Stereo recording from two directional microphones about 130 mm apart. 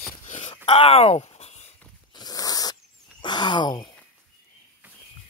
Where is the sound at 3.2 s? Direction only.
35° left (ahead or behind).